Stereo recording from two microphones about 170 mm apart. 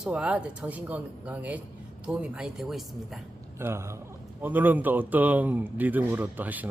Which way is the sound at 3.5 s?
15° right (ahead or behind).